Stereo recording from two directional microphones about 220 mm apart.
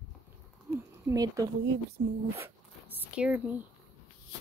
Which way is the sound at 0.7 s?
10° right (ahead or behind).